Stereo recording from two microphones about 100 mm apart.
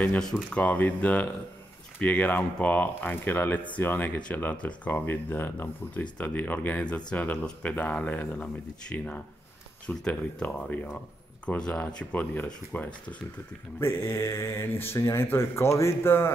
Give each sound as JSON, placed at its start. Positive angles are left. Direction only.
{"t": 0.2, "sound": "speech", "side_deg": 5}
{"t": 0.7, "sound": "speech", "side_deg": 15}
{"t": 13.7, "sound": "speech", "side_deg": 25}